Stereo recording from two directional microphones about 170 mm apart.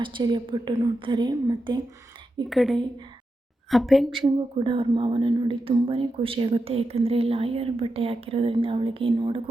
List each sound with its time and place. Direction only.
0.0 s a woman's voice: 25° right (ahead or behind)
2.5 s a woman's voice: centre (ahead or behind)
4.2 s a woman's voice: 30° right (ahead or behind)